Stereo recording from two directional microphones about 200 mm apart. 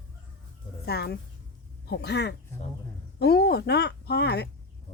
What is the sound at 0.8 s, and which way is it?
Speech, 55° left (ahead or behind).